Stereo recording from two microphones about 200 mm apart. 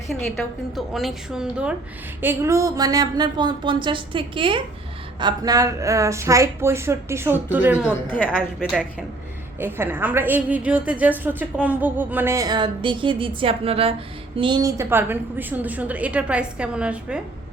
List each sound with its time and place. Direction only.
0.1 s a woman's voice: centre (ahead or behind)
2.2 s music: 15° right (ahead or behind)
5.2 s a woman's voice: 20° right (ahead or behind)
7.9 s a woman's voice: 10° left (ahead or behind)
8.5 s a woman's voice: 5° right (ahead or behind)
11.2 s music: 10° right (ahead or behind); by 13.9 s 30° right (ahead or behind)
14.3 s a woman's voice: 25° right (ahead or behind); by 17.2 s 5° right (ahead or behind)